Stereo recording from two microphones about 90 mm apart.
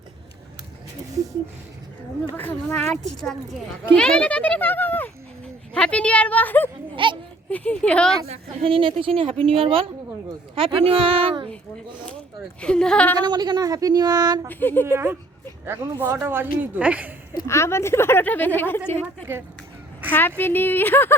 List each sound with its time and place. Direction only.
2.3 s speech: 20° left (ahead or behind)
2.9 s speech: 5° left (ahead or behind)
6.9 s speech: 65° right (ahead or behind)
7.5 s speech: 15° left (ahead or behind)
8.6 s a woman's voice: 80° right
12.5 s speech: 10° left (ahead or behind)
13.2 s speech: 55° right (ahead or behind)
14.4 s speech: 20° left (ahead or behind)
14.8 s a woman's voice: 30° right (ahead or behind); by 17.1 s 15° right (ahead or behind)
17.4 s speech: 30° left (ahead or behind)
20.1 s speech: 20° left (ahead or behind)